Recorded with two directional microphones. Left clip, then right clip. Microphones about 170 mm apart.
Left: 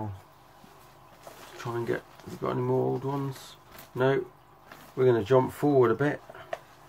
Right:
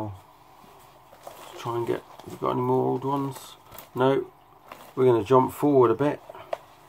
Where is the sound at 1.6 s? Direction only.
20° right (ahead or behind).